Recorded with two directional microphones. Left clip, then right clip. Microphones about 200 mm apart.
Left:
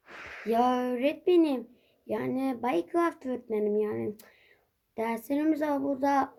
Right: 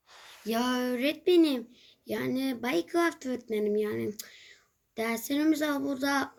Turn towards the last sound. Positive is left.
turn(degrees=-5)  # may be behind; listen again after turning